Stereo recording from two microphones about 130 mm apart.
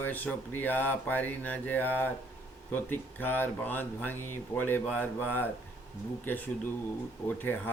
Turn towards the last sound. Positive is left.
turn(degrees=15)  # may be behind; listen again after turning